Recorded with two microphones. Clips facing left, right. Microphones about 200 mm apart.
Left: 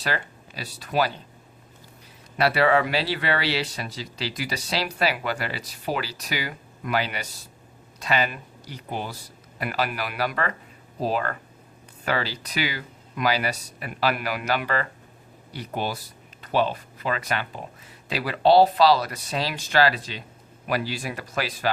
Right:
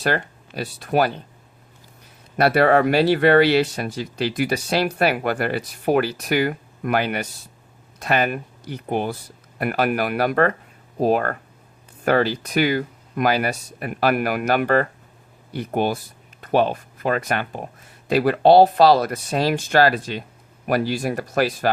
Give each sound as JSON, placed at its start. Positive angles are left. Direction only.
{"t": 0.0, "sound": "speech", "side_deg": -50}
{"t": 2.3, "sound": "speech", "side_deg": -50}